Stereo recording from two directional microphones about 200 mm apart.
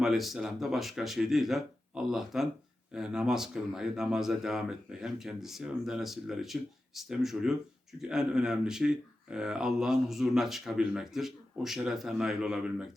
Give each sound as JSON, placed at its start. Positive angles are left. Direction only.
{"t": 0.0, "sound": "speech", "side_deg": 0}